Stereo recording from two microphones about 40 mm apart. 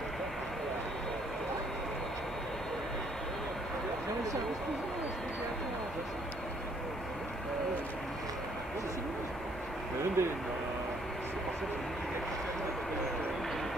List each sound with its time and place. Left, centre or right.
10.2 s speech: right